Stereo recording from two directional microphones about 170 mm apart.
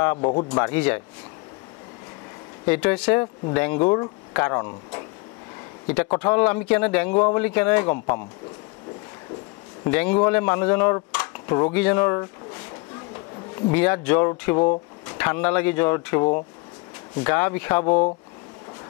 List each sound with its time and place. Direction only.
0.0 s speech: 15° left (ahead or behind)
0.3 s speech: 30° left (ahead or behind)
0.6 s speech: 10° left (ahead or behind)
2.6 s speech: 10° left (ahead or behind)
5.9 s speech: 10° left (ahead or behind)
9.8 s speech: 10° left (ahead or behind)
11.7 s speech: 10° left (ahead or behind)
13.7 s speech: 10° left (ahead or behind)